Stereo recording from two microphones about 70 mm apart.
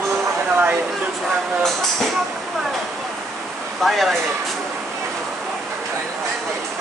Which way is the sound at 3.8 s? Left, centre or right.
Centre.